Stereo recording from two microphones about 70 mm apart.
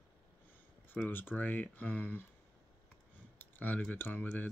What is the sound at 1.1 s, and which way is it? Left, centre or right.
Speech, left.